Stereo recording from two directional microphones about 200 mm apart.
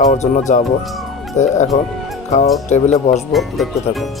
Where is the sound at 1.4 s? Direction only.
35° left (ahead or behind).